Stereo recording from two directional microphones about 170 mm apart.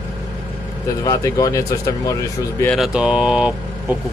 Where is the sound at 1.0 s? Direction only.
20° left (ahead or behind).